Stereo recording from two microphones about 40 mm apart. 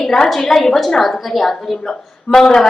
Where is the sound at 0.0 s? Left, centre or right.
Centre.